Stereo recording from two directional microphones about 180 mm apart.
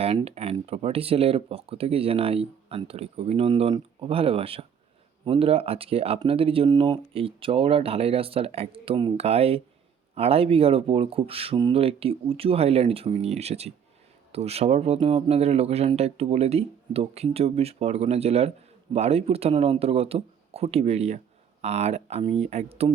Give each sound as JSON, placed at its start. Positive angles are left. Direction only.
{"t": 0.0, "sound": "speech", "side_deg": -35}